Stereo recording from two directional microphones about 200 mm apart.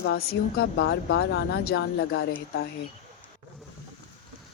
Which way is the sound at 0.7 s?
60° left (ahead or behind).